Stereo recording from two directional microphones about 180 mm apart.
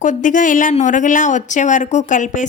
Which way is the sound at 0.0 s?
45° left (ahead or behind).